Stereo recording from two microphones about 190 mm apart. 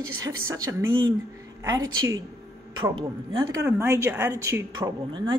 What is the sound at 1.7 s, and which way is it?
Speech, 15° right (ahead or behind).